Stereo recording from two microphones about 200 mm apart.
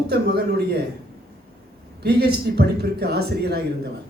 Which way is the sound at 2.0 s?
55° right (ahead or behind).